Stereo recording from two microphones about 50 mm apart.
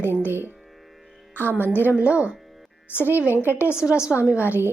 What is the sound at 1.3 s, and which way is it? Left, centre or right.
Speech, left.